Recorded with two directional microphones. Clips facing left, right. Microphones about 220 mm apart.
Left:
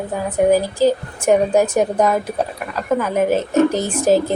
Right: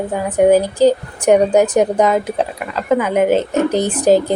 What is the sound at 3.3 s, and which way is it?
Speech, 20° right (ahead or behind).